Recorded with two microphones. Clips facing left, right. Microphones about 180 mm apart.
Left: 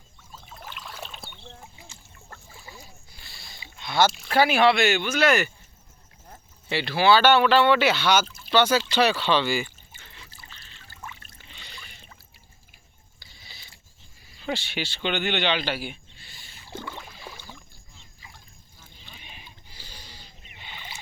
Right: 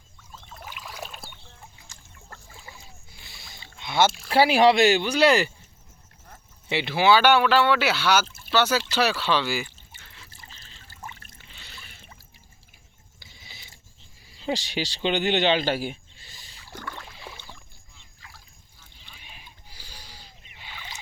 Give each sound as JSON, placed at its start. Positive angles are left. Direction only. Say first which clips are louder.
{"t": 0.4, "sound": "rowboat", "louder": "even", "side_deg": 0}
{"t": 2.3, "sound": "boat", "louder": "even", "side_deg": 0}
{"t": 3.2, "sound": "a sound", "louder": "right 1 dB", "side_deg": -20}
{"t": 3.8, "sound": "speech", "louder": "even", "side_deg": -20}
{"t": 6.7, "sound": "speech", "louder": "even", "side_deg": -20}
{"t": 8.4, "sound": "a sound", "louder": "left 3 dB", "side_deg": -5}
{"t": 10.7, "sound": "pour", "louder": "right 1 dB", "side_deg": -35}
{"t": 11.4, "sound": "a sound", "louder": "left 2 dB", "side_deg": -5}
{"t": 13.2, "sound": "mechanisms", "louder": "right 1 dB", "side_deg": -15}
{"t": 14.3, "sound": "speech", "louder": "right 2 dB", "side_deg": -30}
{"t": 16.6, "sound": "rowboat", "louder": "left 2 dB", "side_deg": 15}
{"t": 17.0, "sound": "rowboat", "louder": "even", "side_deg": 0}
{"t": 19.1, "sound": "a sound", "louder": "left 1 dB", "side_deg": -5}
{"t": 20.7, "sound": "rowboat", "louder": "even", "side_deg": 10}